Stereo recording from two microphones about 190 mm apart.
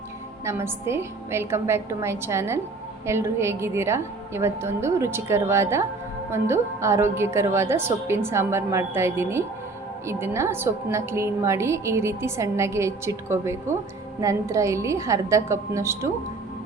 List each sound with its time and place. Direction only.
0.4 s a woman's voice: 15° right (ahead or behind)